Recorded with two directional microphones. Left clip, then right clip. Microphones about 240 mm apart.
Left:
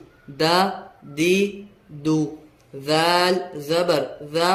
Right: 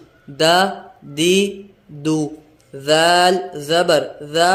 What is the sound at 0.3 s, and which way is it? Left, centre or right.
Speech, centre.